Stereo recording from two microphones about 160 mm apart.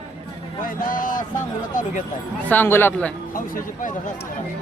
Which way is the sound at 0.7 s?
60° left (ahead or behind).